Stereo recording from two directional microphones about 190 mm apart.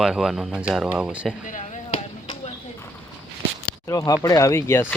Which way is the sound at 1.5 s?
40° left (ahead or behind).